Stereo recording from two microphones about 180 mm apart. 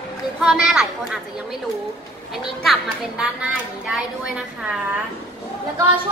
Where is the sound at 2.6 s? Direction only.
5° right (ahead or behind).